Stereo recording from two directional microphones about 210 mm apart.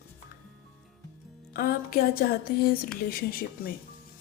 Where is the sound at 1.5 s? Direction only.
45° left (ahead or behind).